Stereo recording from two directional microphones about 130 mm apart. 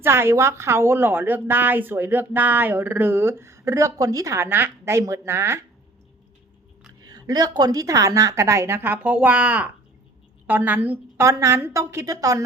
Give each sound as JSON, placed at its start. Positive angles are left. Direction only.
{"t": 0.0, "sound": "a woman's voice", "side_deg": -20}
{"t": 7.0, "sound": "a woman's voice", "side_deg": -30}